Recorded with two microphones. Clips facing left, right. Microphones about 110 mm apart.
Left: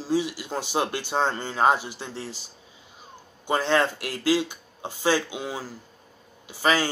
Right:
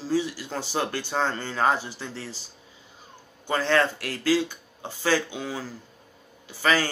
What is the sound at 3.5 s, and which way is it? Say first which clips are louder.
A man's voice: even; 20° left (ahead or behind).